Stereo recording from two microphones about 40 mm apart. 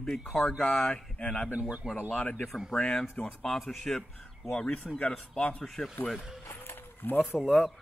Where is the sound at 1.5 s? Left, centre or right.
Right.